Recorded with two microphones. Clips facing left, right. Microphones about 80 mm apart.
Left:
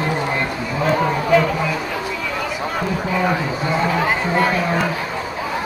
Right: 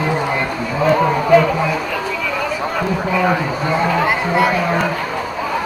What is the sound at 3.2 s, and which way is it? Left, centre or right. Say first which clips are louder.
Speech: right 3 dB; centre.